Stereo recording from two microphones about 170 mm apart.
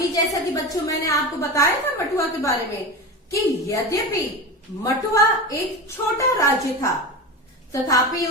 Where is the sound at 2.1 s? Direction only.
20° left (ahead or behind).